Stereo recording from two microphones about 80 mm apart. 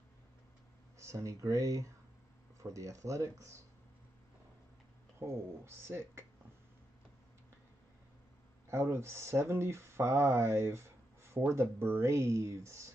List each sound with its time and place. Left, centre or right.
0.9 s speech: right
5.2 s speech: right
8.6 s speech: right